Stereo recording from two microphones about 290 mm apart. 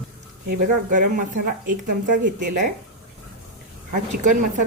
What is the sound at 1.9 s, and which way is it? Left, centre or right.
Speech, right.